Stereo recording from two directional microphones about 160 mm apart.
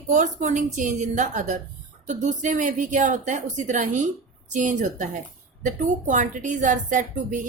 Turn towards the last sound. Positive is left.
turn(degrees=-50)  # may be behind; listen again after turning